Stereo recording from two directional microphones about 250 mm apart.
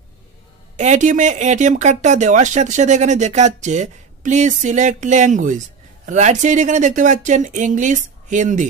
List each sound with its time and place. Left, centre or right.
0.7 s speech: right